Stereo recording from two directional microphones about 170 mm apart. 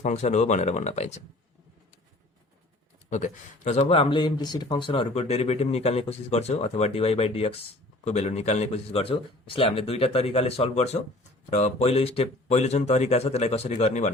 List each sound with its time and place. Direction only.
0.0 s speech: 45° left (ahead or behind)
3.1 s speech: 45° left (ahead or behind)